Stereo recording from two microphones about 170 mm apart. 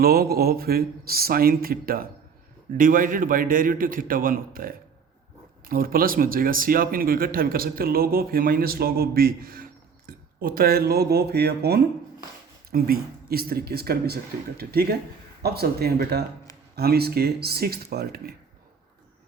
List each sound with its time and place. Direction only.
0.0 s speech: 65° right (ahead or behind)